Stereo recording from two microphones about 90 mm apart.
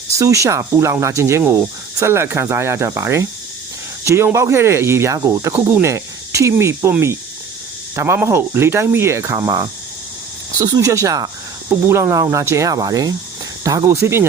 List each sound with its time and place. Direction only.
0.1 s speech: 35° right (ahead or behind)
7.9 s speech: 30° right (ahead or behind)